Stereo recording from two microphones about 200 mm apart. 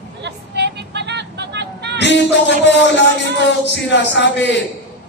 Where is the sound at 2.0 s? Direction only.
60° left (ahead or behind).